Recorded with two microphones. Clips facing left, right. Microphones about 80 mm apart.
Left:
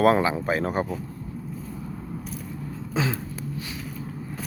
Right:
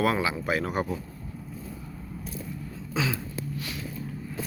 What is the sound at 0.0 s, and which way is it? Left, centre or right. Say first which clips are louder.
Speech: left 6 dB; left.